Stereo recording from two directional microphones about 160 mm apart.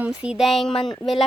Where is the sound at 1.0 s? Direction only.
Centre (ahead or behind).